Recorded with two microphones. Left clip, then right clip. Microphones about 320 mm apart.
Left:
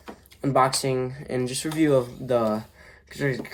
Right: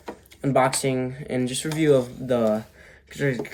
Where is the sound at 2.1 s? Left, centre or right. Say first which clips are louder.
Right 1 dB; centre.